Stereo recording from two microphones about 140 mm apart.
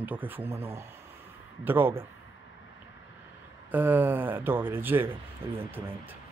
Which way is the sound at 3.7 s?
15° right (ahead or behind).